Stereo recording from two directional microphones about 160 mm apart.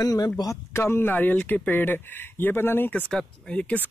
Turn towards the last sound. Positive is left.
turn(degrees=5)  # may be behind; listen again after turning